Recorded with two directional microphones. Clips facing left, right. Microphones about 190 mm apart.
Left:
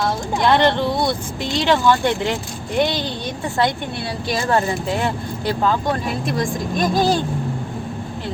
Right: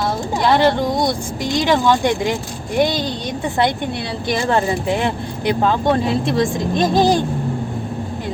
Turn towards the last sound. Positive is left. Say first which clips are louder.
# right 3 dB
turn(degrees=-20)  # may be behind; listen again after turning